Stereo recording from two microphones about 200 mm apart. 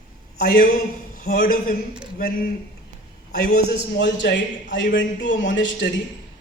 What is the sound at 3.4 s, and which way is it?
A man's voice, 55° left (ahead or behind).